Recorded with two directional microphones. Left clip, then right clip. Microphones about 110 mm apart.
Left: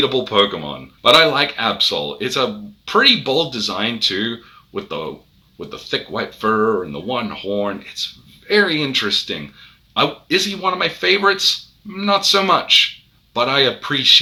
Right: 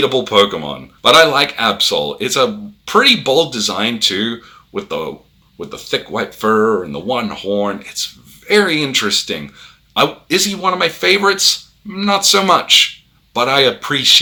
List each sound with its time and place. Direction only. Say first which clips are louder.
0.0 s speech: right 3 dB; 35° right (ahead or behind)